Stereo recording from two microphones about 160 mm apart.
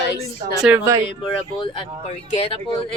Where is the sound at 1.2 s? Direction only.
30° left (ahead or behind).